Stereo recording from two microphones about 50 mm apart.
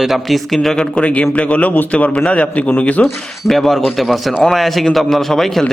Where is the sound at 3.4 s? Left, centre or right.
Centre.